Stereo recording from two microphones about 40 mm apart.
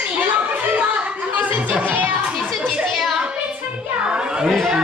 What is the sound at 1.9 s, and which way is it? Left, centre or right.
Music, right.